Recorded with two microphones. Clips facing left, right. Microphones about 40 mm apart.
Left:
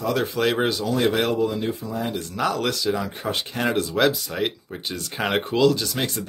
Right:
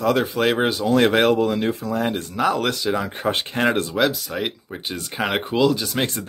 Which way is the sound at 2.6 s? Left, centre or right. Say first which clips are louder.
Right 2 dB; right.